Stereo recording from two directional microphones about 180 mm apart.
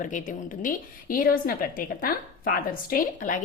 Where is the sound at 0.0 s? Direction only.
45° left (ahead or behind).